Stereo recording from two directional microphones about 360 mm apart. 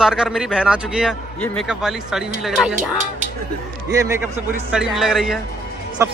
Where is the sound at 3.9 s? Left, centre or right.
Centre.